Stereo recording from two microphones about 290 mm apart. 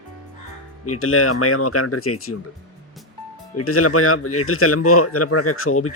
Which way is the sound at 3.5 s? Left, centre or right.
Left.